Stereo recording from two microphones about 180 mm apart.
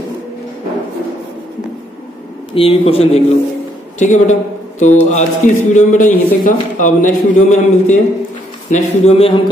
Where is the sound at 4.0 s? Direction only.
40° left (ahead or behind).